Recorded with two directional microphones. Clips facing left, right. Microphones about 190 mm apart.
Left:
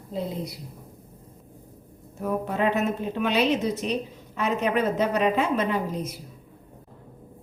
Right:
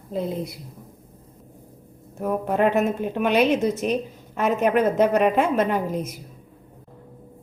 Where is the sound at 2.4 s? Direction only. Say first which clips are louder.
Right 5 dB; 50° right (ahead or behind).